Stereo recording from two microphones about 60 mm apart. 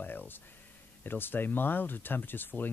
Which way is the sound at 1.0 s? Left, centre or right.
Left.